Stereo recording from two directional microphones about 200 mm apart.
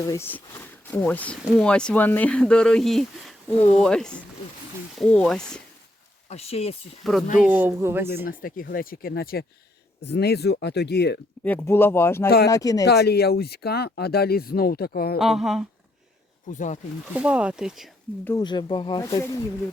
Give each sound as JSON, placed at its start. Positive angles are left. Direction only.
{"t": 0.1, "sound": "speech", "side_deg": 10}
{"t": 6.2, "sound": "speech", "side_deg": 30}
{"t": 7.0, "sound": "speech", "side_deg": 0}
{"t": 8.2, "sound": "speech", "side_deg": 45}
{"t": 11.4, "sound": "speech", "side_deg": 10}
{"t": 12.8, "sound": "speech", "side_deg": 55}
{"t": 15.2, "sound": "speech", "side_deg": 0}
{"t": 16.5, "sound": "speech", "side_deg": 40}
{"t": 17.2, "sound": "speech", "side_deg": -5}
{"t": 18.3, "sound": "speech", "side_deg": 20}